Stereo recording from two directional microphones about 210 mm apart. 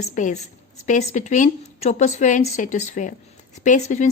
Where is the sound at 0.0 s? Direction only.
35° left (ahead or behind).